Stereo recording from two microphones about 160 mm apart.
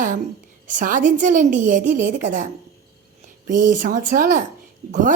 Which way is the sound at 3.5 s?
55° right (ahead or behind).